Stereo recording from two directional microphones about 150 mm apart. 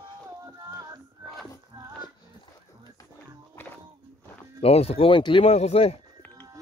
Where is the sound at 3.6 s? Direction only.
15° left (ahead or behind).